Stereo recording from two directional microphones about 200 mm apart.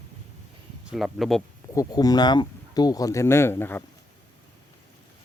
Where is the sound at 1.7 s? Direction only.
20° left (ahead or behind).